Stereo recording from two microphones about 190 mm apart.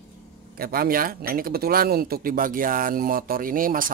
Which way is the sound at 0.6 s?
50° right (ahead or behind).